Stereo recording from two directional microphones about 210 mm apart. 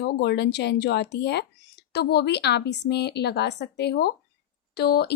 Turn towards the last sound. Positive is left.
turn(degrees=50)  # may be behind; listen again after turning